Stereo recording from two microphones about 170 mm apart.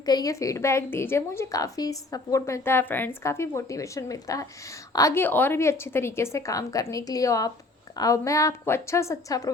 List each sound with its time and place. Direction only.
0.0 s a woman's voice: 25° left (ahead or behind)